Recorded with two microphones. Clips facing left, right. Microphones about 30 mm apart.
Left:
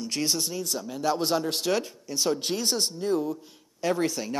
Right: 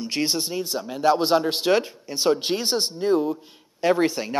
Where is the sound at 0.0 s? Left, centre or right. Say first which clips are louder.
Right 3 dB; right.